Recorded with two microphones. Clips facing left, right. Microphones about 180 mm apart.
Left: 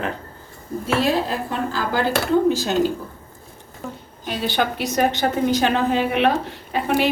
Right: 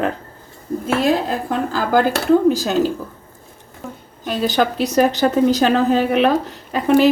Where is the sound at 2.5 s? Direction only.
40° right (ahead or behind).